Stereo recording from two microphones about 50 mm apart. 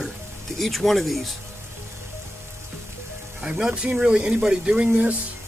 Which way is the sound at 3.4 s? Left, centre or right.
Centre.